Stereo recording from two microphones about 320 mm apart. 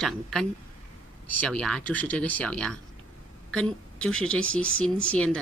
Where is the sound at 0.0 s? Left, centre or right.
Centre.